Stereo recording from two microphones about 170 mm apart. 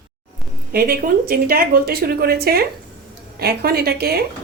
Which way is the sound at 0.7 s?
60° right (ahead or behind).